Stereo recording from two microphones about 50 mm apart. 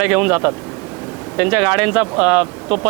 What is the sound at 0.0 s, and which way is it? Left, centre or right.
Speech, centre.